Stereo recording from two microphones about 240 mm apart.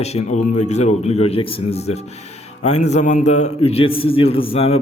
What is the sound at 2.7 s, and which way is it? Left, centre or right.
A man's voice, left.